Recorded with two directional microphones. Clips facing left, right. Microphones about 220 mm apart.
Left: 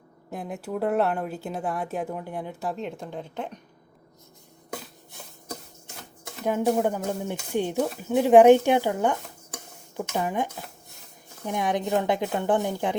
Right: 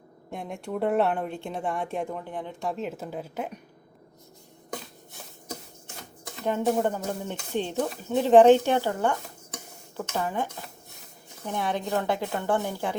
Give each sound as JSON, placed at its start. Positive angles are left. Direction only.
{"t": 0.3, "sound": "speech", "side_deg": 0}
{"t": 6.2, "sound": "speech", "side_deg": 10}